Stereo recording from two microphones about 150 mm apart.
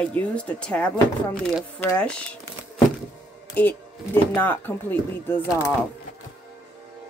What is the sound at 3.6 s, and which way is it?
Speech, 10° left (ahead or behind).